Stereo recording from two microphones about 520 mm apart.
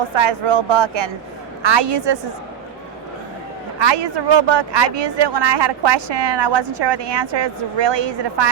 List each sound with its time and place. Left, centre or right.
0.2 s speech: right
3.8 s speech: right